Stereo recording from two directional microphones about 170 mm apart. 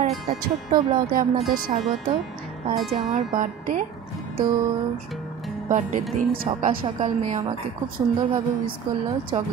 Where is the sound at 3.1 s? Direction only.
50° right (ahead or behind).